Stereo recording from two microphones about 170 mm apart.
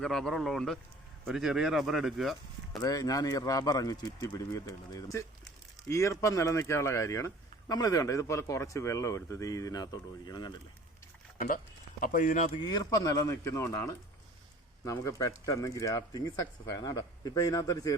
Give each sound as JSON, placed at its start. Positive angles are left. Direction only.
{"t": 0.0, "sound": "speech", "side_deg": 5}
{"t": 2.7, "sound": "speech", "side_deg": 20}
{"t": 11.3, "sound": "speech", "side_deg": 50}
{"t": 12.6, "sound": "speech", "side_deg": 20}